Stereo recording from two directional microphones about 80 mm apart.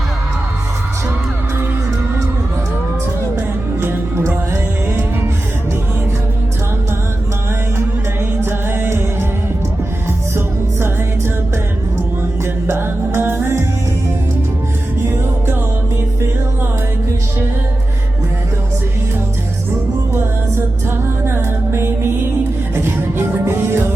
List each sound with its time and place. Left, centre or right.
3.3 s music: right
7.8 s music: right
10.3 s music: right
12.6 s music: right
21.2 s music: right